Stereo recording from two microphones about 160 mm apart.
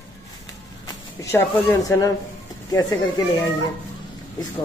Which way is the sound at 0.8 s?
15° left (ahead or behind).